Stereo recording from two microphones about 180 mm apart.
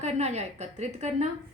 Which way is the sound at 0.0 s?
40° right (ahead or behind).